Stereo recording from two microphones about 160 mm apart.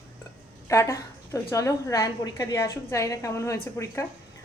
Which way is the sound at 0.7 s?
20° left (ahead or behind).